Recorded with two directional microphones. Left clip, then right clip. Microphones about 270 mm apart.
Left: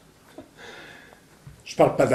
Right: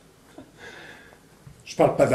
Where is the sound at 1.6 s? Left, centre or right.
Centre.